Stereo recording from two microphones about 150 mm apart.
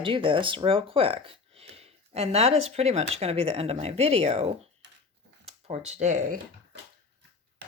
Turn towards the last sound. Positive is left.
turn(degrees=-55)  # may be behind; listen again after turning